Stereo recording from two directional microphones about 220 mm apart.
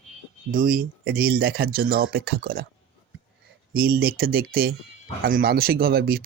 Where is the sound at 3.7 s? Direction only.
45° right (ahead or behind).